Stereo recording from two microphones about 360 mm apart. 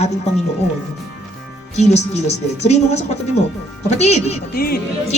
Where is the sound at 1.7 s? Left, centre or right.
Centre.